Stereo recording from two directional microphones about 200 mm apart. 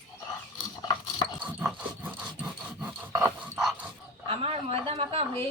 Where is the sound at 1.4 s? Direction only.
5° right (ahead or behind).